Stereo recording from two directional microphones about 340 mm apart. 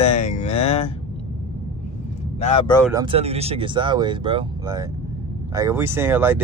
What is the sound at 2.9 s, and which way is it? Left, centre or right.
Speech, centre.